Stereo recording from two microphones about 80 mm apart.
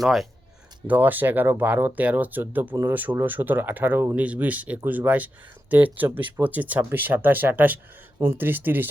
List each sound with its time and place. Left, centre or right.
0.0 s speech: centre
0.9 s speech: right